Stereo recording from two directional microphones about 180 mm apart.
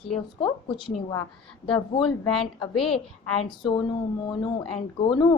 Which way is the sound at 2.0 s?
Centre (ahead or behind).